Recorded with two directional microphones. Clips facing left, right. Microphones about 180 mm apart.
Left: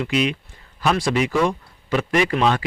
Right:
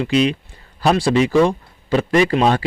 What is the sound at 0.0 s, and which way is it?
Speech, 30° right (ahead or behind).